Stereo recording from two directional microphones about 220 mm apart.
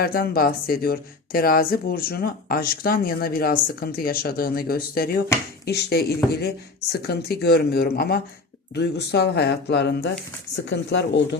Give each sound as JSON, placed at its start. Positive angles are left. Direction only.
{"t": 0.0, "sound": "speech", "side_deg": 45}